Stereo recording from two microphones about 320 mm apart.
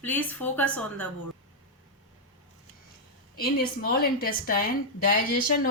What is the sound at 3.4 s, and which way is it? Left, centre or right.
A woman's voice, left.